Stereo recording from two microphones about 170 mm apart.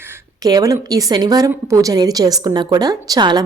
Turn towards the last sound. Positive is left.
turn(degrees=-25)  # may be behind; listen again after turning